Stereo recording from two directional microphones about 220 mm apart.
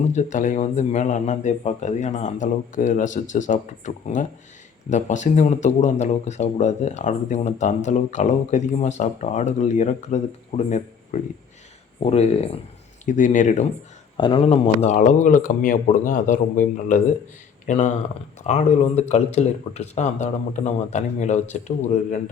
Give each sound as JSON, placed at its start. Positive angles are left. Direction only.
{"t": 0.0, "sound": "speech", "side_deg": 35}
{"t": 14.2, "sound": "speech", "side_deg": 25}